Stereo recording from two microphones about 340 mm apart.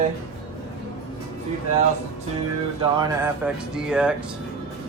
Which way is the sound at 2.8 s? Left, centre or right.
Centre.